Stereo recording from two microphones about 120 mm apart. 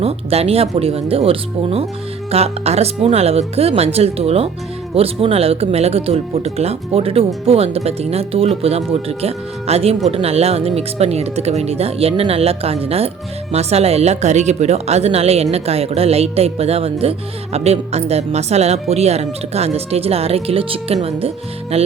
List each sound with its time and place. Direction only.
0.0 s speech: 55° right (ahead or behind)